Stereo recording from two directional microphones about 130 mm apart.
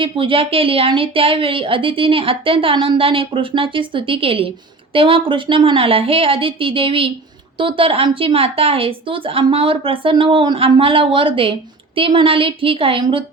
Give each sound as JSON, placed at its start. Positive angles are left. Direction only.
{"t": 0.0, "sound": "a woman's voice", "side_deg": -40}